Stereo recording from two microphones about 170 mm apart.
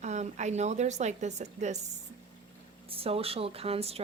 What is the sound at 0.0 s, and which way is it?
A woman's voice, 45° right (ahead or behind).